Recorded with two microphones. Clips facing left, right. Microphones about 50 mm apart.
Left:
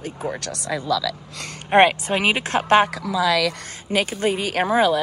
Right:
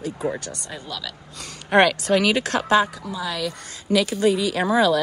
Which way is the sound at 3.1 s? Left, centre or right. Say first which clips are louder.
Left 9 dB; left.